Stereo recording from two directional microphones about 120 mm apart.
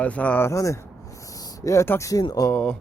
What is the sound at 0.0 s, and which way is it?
Speech, 10° left (ahead or behind).